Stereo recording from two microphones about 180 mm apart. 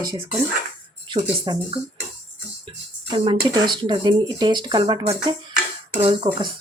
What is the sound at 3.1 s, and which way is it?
Speech, 30° right (ahead or behind).